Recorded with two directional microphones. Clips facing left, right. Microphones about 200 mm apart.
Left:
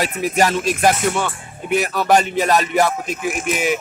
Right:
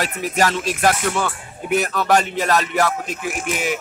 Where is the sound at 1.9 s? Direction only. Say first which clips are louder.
Left 2 dB; 15° left (ahead or behind).